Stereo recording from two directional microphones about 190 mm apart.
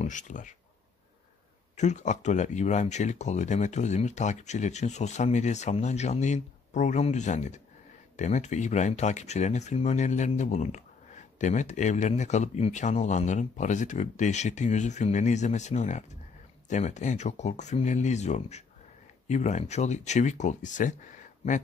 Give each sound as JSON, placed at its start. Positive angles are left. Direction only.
{"t": 0.0, "sound": "speech", "side_deg": 40}
{"t": 1.8, "sound": "speech", "side_deg": 40}